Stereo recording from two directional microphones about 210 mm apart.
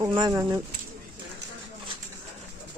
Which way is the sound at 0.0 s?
15° right (ahead or behind).